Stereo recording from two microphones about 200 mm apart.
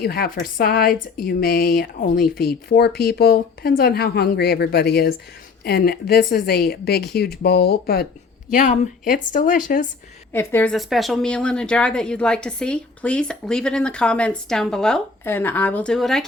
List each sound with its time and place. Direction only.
0.0 s speech: 50° left (ahead or behind)
8.5 s a woman's voice: 35° left (ahead or behind)
10.3 s a woman's voice: 10° left (ahead or behind)